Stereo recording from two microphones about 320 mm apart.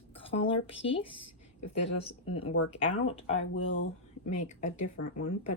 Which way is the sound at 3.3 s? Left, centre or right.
Left.